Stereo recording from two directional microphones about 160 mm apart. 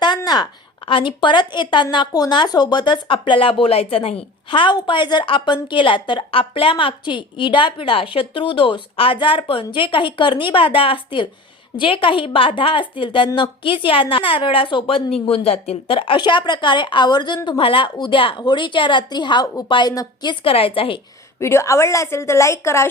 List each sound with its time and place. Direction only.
0.0 s a sound: 25° left (ahead or behind)
0.9 s speech: 30° left (ahead or behind)
20.4 s speech: 35° left (ahead or behind)
21.3 s a woman's voice: 15° left (ahead or behind)